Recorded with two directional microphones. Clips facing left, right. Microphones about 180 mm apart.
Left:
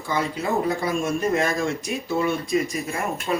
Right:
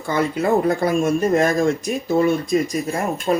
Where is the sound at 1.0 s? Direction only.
35° right (ahead or behind).